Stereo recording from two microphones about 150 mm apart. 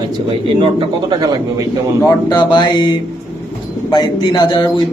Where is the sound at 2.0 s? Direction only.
25° left (ahead or behind).